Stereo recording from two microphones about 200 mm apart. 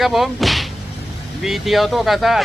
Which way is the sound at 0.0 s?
Centre (ahead or behind).